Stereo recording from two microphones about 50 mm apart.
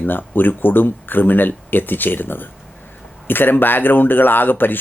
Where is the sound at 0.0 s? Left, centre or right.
Left.